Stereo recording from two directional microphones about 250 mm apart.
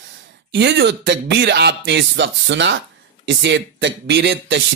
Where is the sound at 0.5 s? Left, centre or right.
Right.